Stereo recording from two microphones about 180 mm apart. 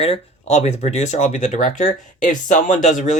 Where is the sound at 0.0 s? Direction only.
35° left (ahead or behind).